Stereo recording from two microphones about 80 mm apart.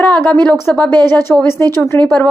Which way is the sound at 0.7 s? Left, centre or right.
Centre.